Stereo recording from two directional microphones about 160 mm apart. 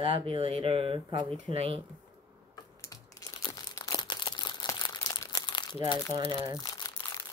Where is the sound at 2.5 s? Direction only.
20° left (ahead or behind).